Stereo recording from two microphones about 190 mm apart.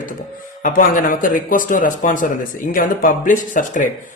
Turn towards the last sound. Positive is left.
turn(degrees=45)  # may be behind; listen again after turning